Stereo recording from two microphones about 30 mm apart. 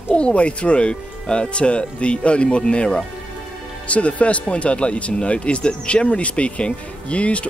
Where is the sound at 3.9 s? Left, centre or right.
Left.